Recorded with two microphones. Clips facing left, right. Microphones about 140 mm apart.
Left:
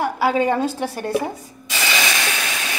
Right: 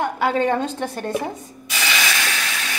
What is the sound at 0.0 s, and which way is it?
A woman's voice, 5° left (ahead or behind).